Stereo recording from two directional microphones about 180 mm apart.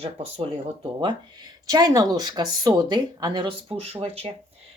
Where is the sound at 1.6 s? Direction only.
20° right (ahead or behind).